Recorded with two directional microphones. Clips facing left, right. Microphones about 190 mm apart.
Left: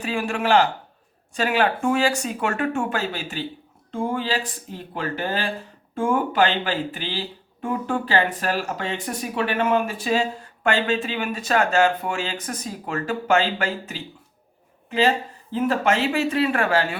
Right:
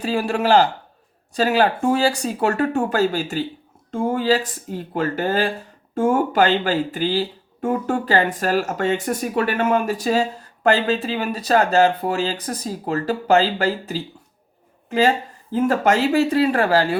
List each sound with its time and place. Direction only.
0.0 s a woman's voice: 35° right (ahead or behind)